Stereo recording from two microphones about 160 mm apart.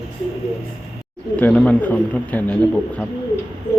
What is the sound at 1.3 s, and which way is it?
A man's voice, 10° left (ahead or behind).